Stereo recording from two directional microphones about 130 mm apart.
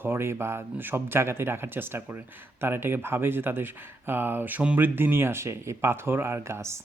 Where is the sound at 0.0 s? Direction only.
20° right (ahead or behind).